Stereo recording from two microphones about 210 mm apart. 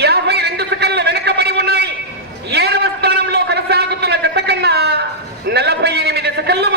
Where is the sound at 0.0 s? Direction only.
50° right (ahead or behind).